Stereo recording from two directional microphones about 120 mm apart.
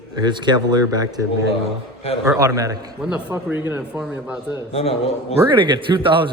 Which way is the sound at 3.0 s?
10° right (ahead or behind).